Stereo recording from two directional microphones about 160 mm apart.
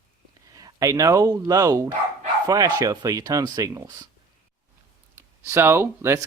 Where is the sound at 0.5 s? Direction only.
20° right (ahead or behind).